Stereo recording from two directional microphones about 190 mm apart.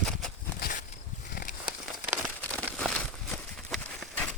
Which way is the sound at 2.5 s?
5° left (ahead or behind).